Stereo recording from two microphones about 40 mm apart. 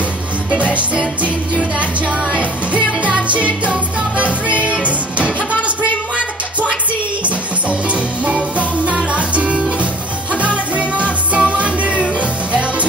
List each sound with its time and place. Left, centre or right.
2.7 s music: right
7.9 s music: right